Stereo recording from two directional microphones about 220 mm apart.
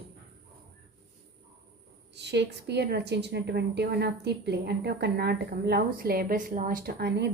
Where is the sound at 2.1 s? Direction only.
50° right (ahead or behind).